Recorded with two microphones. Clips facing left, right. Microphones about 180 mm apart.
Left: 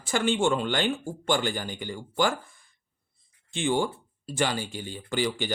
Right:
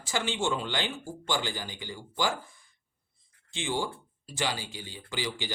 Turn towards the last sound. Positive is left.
turn(degrees=55)  # may be behind; listen again after turning